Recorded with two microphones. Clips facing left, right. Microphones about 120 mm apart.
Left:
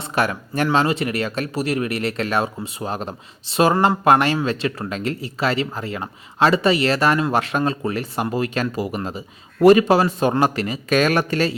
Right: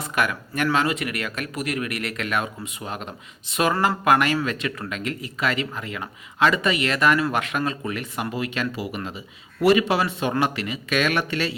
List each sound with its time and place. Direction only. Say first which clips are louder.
0.0 s speech: left 3 dB; 30° left (ahead or behind)